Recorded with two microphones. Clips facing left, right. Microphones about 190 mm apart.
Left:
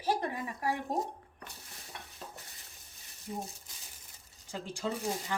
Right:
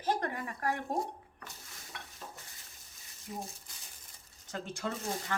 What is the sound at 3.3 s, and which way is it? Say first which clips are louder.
Speech: left 2 dB; 30° left (ahead or behind).